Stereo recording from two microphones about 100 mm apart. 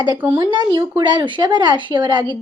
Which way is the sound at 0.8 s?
50° right (ahead or behind).